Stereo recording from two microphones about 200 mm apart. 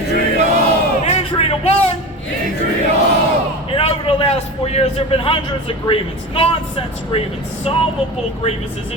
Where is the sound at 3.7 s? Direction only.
30° left (ahead or behind).